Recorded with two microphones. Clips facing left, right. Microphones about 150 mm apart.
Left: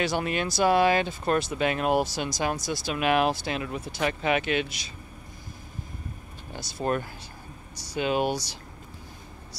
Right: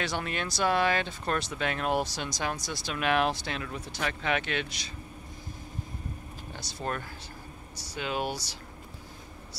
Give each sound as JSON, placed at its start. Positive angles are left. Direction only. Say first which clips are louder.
{"t": 0.0, "sound": "speech", "louder": "left 6 dB", "side_deg": 10}
{"t": 6.8, "sound": "speech", "louder": "left 7 dB", "side_deg": 15}